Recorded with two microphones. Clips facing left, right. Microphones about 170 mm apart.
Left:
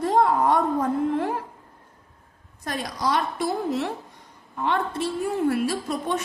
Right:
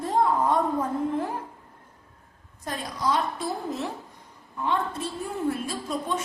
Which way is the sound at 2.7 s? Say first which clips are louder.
Left 2 dB; 80° left.